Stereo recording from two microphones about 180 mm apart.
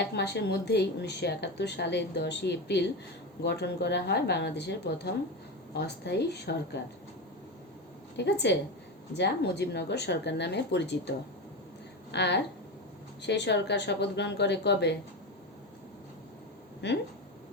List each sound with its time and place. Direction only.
0.1 s speech: 70° left (ahead or behind)
8.1 s speech: 75° left (ahead or behind)
12.1 s speech: 70° left (ahead or behind)
16.8 s speech: 75° left (ahead or behind)